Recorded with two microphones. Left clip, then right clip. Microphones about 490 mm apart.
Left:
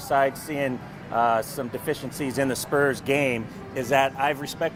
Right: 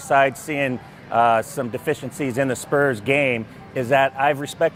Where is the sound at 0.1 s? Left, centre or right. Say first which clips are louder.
Right 5 dB; right.